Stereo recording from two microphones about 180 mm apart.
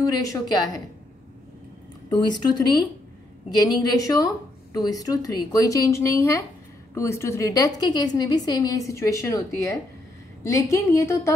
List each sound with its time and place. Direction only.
0.0 s a woman's voice: 20° left (ahead or behind)
2.0 s a woman's voice: 25° left (ahead or behind)